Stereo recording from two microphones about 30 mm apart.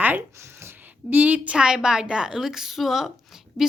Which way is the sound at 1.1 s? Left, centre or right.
Right.